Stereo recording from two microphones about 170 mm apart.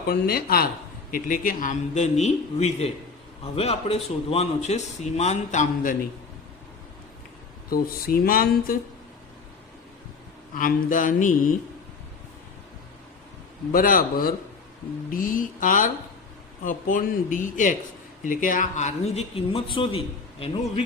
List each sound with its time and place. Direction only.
0.1 s speech: 65° left (ahead or behind); by 6.0 s 50° left (ahead or behind)
7.7 s speech: 60° left (ahead or behind)
10.5 s speech: 55° left (ahead or behind)
13.7 s speech: 55° left (ahead or behind); by 20.8 s 35° left (ahead or behind)